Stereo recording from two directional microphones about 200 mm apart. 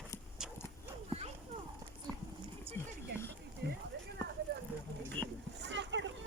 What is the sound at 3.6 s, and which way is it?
Clip-clop, 55° right (ahead or behind).